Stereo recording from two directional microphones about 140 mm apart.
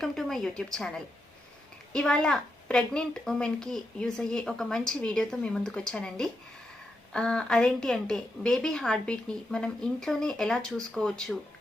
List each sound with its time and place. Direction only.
0.0 s a woman's voice: 5° left (ahead or behind)